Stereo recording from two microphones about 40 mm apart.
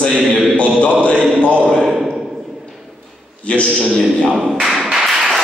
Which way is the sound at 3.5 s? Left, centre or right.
Left.